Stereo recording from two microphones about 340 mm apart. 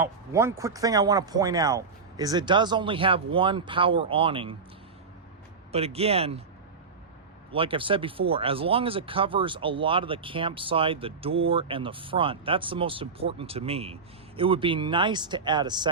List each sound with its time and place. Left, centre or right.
0.0 s speech: centre
5.7 s speech: centre
7.5 s speech: centre